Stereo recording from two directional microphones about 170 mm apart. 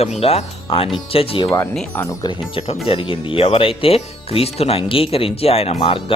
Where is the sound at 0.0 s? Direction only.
35° left (ahead or behind).